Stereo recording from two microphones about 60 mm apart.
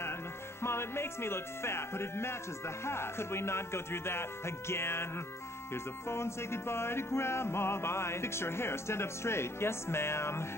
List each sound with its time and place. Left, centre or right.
0.6 s music: left
6.0 s music: left